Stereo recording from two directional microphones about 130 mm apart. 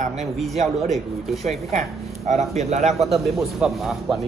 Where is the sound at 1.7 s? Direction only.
55° right (ahead or behind).